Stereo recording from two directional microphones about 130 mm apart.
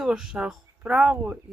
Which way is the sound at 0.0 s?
5° right (ahead or behind).